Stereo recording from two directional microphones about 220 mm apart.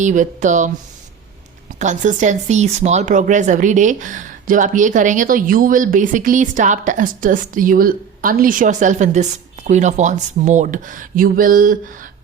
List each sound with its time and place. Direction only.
0.0 s speech: 35° right (ahead or behind)
1.8 s speech: 35° right (ahead or behind)